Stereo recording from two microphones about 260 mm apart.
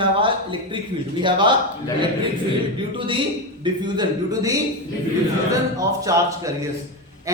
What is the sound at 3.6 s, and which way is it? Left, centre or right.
Speech, centre.